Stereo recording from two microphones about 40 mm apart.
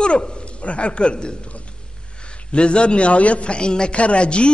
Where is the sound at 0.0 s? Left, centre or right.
Left.